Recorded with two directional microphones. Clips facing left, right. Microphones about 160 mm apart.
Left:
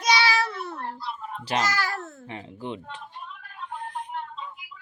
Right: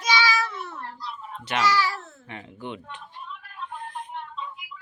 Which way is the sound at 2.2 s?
30° left (ahead or behind).